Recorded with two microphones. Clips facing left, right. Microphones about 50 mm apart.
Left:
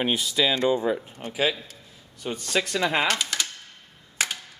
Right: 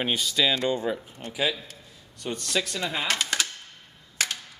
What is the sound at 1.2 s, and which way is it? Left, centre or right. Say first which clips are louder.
A man's voice: left 2 dB; left.